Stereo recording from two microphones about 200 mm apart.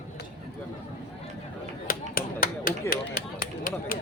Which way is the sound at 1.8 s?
45° left (ahead or behind).